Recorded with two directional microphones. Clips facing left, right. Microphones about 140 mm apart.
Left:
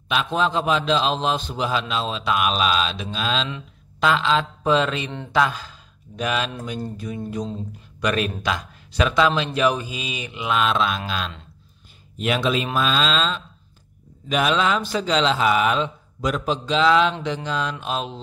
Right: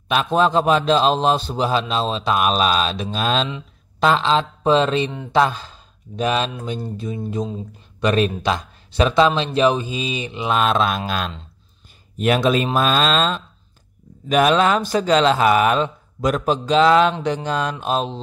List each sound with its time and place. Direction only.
0.1 s a man's voice: 45° right (ahead or behind)
4.0 s speech: 35° right (ahead or behind)